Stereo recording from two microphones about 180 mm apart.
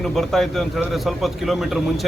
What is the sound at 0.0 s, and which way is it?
Speech, centre (ahead or behind).